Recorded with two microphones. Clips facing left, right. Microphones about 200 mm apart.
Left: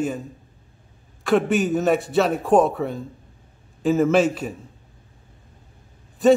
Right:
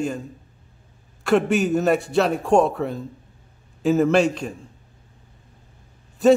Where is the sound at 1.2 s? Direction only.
Centre (ahead or behind).